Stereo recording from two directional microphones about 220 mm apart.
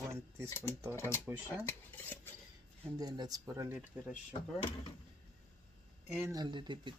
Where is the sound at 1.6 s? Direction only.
10° left (ahead or behind).